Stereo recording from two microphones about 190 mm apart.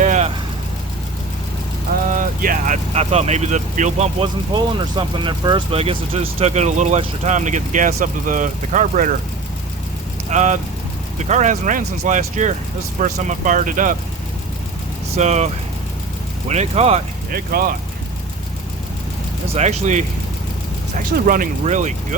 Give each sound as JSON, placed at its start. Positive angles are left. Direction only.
{"t": 0.0, "sound": "vehicle", "side_deg": -40}
{"t": 2.0, "sound": "speech", "side_deg": -45}
{"t": 10.2, "sound": "speech", "side_deg": -40}
{"t": 15.1, "sound": "speech", "side_deg": -35}
{"t": 16.5, "sound": "speech", "side_deg": -35}
{"t": 17.3, "sound": "speech", "side_deg": -50}
{"t": 19.5, "sound": "speech", "side_deg": -35}
{"t": 21.2, "sound": "speech", "side_deg": -45}